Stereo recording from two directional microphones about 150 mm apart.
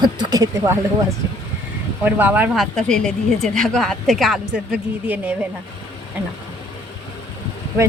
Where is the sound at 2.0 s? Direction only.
10° right (ahead or behind).